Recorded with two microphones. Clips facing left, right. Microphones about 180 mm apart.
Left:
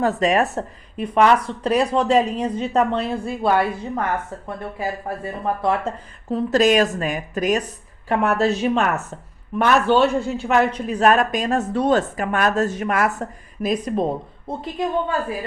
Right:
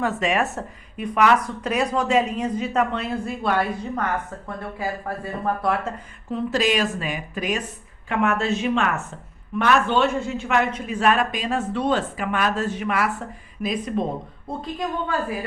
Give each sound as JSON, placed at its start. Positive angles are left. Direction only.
{"t": 0.0, "sound": "speech", "side_deg": 40}
{"t": 6.3, "sound": "speech", "side_deg": 45}
{"t": 10.1, "sound": "a man's voice", "side_deg": 0}
{"t": 10.5, "sound": "a woman's voice", "side_deg": 35}
{"t": 14.4, "sound": "speech", "side_deg": 20}